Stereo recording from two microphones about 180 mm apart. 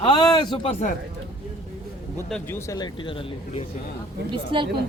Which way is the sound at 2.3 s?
15° left (ahead or behind).